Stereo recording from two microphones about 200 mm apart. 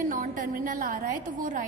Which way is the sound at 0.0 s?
45° right (ahead or behind).